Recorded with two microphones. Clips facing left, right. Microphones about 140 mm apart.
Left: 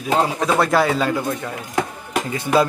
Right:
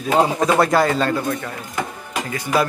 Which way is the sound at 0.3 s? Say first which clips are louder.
Right 2 dB; centre (ahead or behind).